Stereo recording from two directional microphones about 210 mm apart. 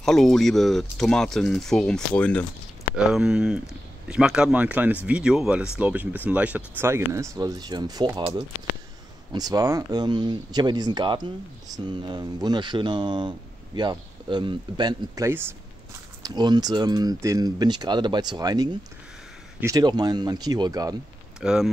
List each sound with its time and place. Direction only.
0.0 s speech: centre (ahead or behind); by 20.9 s 20° right (ahead or behind)
21.4 s speech: 5° right (ahead or behind)